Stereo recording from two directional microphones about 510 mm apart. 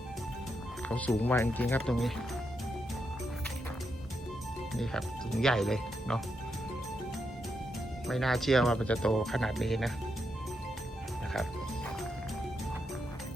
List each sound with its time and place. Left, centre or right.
0.9 s speech: centre
4.7 s speech: centre
8.0 s speech: centre